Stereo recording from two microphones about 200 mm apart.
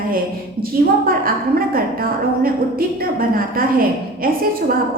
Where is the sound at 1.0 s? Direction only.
45° right (ahead or behind).